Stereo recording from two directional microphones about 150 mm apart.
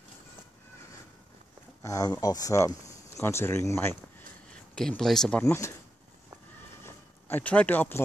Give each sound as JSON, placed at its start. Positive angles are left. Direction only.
{"t": 1.8, "sound": "speech", "side_deg": 20}
{"t": 4.5, "sound": "speech", "side_deg": 5}
{"t": 5.4, "sound": "speech", "side_deg": 15}
{"t": 6.8, "sound": "a sound", "side_deg": 15}